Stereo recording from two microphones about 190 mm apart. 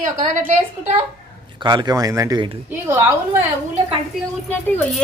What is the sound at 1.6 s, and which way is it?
A woman's voice, 25° right (ahead or behind).